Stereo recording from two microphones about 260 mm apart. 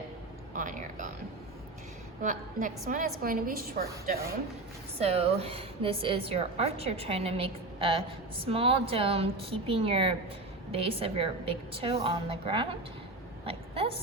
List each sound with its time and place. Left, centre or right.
0.5 s a woman's voice: right
2.2 s a woman's voice: right
4.9 s a woman's voice: right
13.4 s a sound: right